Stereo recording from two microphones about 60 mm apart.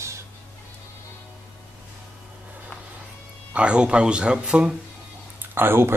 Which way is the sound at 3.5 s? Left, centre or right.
Centre.